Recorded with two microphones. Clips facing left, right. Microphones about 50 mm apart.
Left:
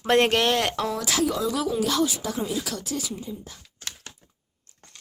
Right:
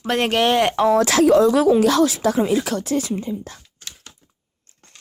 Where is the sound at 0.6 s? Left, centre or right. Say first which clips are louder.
Right 8 dB; right.